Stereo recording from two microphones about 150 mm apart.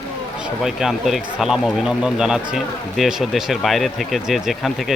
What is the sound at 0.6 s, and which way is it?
Speech, centre (ahead or behind).